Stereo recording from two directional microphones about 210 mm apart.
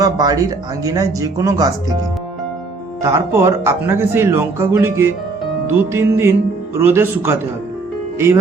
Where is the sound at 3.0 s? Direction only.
15° right (ahead or behind).